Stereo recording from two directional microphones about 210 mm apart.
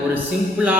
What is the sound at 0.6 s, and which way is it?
Speech, 5° right (ahead or behind).